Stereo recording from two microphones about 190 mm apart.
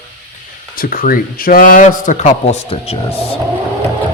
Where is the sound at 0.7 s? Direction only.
50° left (ahead or behind); by 3.2 s 30° left (ahead or behind).